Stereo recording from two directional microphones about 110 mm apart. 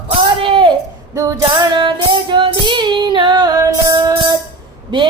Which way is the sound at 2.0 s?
45° right (ahead or behind).